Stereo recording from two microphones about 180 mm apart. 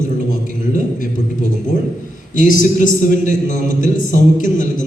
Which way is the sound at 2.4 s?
45° left (ahead or behind).